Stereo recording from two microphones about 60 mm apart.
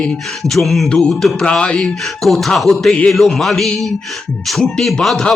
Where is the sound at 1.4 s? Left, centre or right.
Centre.